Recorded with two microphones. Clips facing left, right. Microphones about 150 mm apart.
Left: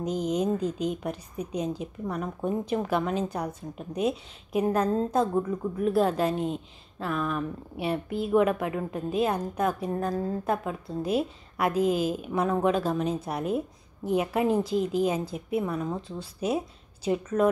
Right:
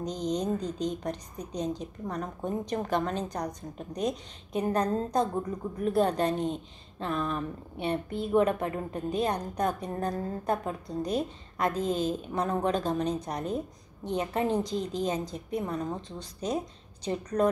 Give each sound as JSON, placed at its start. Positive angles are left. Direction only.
{"t": 0.0, "sound": "a woman's voice", "side_deg": 5}